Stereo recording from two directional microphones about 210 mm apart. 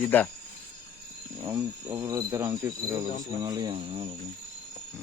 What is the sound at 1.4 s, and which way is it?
Speech, 15° right (ahead or behind).